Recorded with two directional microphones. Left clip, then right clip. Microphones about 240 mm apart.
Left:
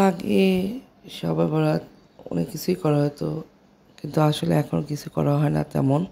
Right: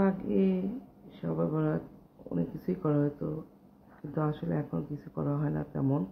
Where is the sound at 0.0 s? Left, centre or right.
Left.